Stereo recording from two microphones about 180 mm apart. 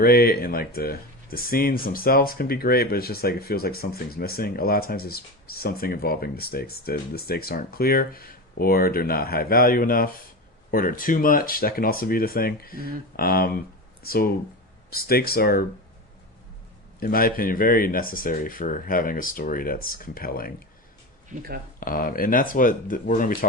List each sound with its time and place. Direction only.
0.0 s speech: 55° left (ahead or behind)
17.0 s speech: 55° left (ahead or behind)
21.8 s speech: 50° left (ahead or behind)